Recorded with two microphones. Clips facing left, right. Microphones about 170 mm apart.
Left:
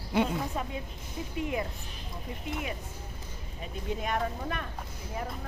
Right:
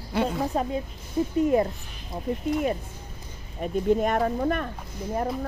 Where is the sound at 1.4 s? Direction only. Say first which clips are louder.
Right 11 dB; 40° right (ahead or behind).